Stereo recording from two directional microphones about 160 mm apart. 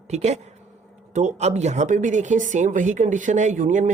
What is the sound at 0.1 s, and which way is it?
Speech, 45° right (ahead or behind).